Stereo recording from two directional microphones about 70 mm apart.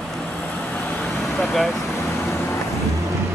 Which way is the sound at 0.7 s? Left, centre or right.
Left.